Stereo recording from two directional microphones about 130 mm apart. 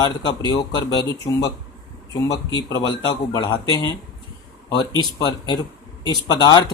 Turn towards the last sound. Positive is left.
turn(degrees=35)  # may be behind; listen again after turning